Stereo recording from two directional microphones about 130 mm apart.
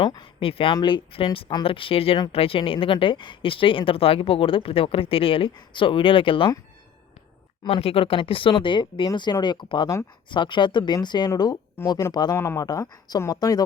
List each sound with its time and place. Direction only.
0.0 s speech: 35° left (ahead or behind)
7.6 s speech: 50° left (ahead or behind); by 13.7 s 30° left (ahead or behind)